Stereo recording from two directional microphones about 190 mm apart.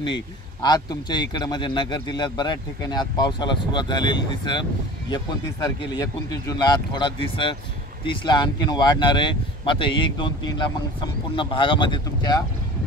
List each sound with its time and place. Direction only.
0.0 s speech: 25° left (ahead or behind)